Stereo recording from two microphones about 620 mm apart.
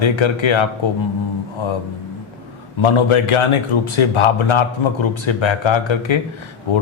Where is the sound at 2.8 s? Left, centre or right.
Left.